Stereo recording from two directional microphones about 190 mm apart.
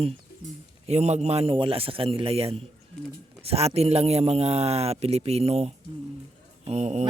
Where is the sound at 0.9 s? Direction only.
35° right (ahead or behind).